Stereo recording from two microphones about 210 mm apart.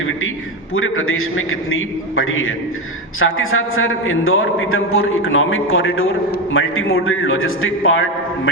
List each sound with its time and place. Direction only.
0.7 s a man's voice: 75° left (ahead or behind)